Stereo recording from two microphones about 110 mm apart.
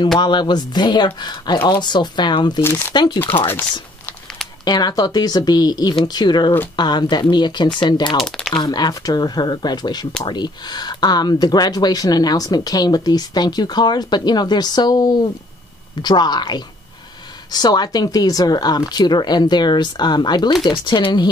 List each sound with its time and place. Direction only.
0.2 s speech: 45° left (ahead or behind)
2.6 s speech: 20° left (ahead or behind)
2.9 s speech: 40° left (ahead or behind)
3.3 s speech: 20° left (ahead or behind)
4.6 s speech: 35° left (ahead or behind)
8.2 s speech: centre (ahead or behind)
8.5 s speech: 40° left (ahead or behind)